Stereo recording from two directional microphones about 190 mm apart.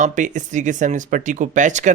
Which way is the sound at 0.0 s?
40° right (ahead or behind).